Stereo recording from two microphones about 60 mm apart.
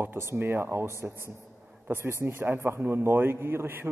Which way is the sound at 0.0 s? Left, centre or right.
Right.